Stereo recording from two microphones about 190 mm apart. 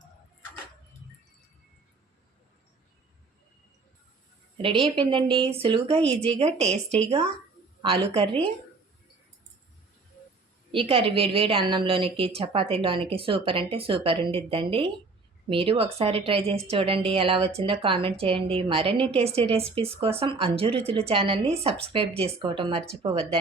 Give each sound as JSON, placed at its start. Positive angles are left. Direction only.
{"t": 4.5, "sound": "a woman's voice", "side_deg": -25}
{"t": 10.7, "sound": "a woman's voice", "side_deg": -30}